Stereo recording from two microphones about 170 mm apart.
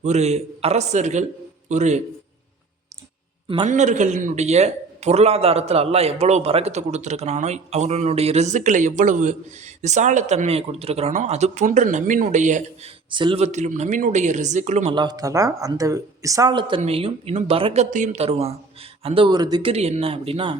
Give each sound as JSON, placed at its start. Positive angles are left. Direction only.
{"t": 0.0, "sound": "a man's voice", "side_deg": -40}
{"t": 3.7, "sound": "a man's voice", "side_deg": -45}
{"t": 13.1, "sound": "speech", "side_deg": -30}
{"t": 13.4, "sound": "speech", "side_deg": -45}
{"t": 14.9, "sound": "a man's voice", "side_deg": -25}
{"t": 19.7, "sound": "a man's voice", "side_deg": -40}